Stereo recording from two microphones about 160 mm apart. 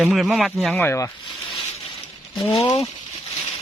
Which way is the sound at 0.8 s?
20° left (ahead or behind).